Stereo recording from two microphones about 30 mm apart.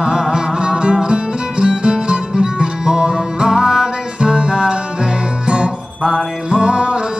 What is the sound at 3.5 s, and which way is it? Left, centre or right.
Music, centre.